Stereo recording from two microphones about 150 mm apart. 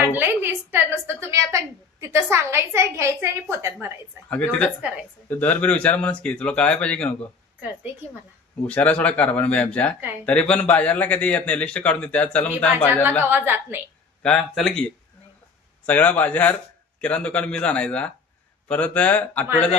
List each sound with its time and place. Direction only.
0.1 s a woman's voice: 15° right (ahead or behind)
4.3 s speech: 5° left (ahead or behind)
8.6 s speech: 10° left (ahead or behind)
13.2 s a woman's voice: 15° right (ahead or behind)
14.2 s speech: 5° left (ahead or behind)